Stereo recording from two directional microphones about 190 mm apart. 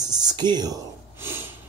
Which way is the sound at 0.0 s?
20° right (ahead or behind).